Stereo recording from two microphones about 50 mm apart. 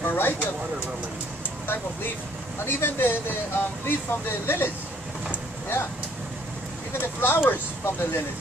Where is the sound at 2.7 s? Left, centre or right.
Left.